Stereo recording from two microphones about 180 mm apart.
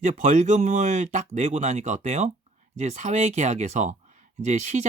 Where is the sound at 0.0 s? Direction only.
45° right (ahead or behind).